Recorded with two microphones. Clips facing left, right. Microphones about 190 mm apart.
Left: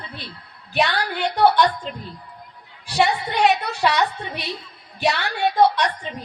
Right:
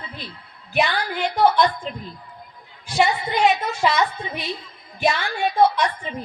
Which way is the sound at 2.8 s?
70° left (ahead or behind).